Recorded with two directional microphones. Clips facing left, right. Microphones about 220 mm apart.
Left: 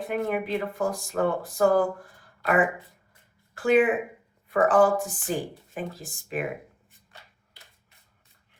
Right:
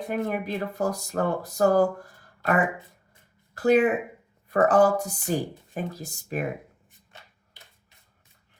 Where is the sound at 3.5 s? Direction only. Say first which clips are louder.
Right 1 dB; 40° right (ahead or behind).